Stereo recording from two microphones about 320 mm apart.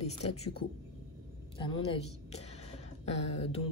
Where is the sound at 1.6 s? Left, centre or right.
Centre.